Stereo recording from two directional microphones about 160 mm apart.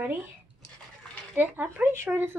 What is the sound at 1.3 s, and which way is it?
Speech, 10° right (ahead or behind).